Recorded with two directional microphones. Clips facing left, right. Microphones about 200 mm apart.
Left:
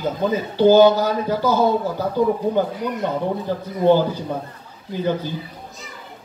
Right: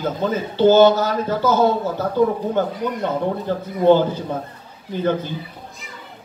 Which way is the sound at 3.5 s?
15° left (ahead or behind).